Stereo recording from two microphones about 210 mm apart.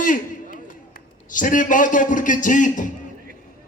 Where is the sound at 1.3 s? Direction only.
40° left (ahead or behind).